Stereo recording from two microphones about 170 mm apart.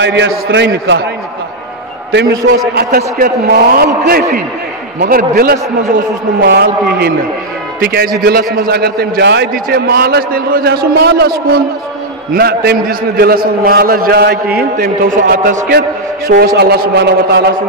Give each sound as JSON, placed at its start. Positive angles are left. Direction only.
{"t": 0.0, "sound": "a man's voice", "side_deg": -90}
{"t": 2.7, "sound": "a man's voice", "side_deg": -65}